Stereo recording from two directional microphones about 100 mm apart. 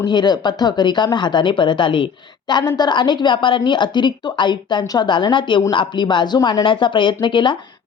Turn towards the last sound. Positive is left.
turn(degrees=55)  # may be behind; listen again after turning